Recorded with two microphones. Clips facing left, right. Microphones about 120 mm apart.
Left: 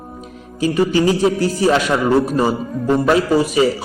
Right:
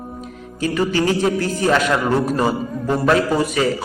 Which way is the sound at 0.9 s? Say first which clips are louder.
Left 3 dB; 15° left (ahead or behind).